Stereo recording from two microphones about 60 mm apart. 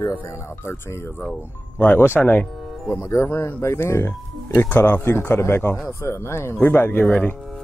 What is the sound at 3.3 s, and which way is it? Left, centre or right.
Speech, left.